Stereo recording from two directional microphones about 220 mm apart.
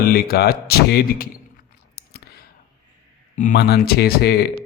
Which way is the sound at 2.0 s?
45° left (ahead or behind).